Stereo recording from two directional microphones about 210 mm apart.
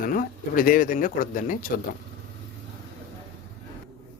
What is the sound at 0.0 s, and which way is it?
Speech, 40° left (ahead or behind).